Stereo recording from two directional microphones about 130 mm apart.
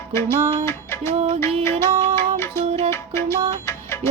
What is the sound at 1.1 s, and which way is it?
Music, 55° right (ahead or behind).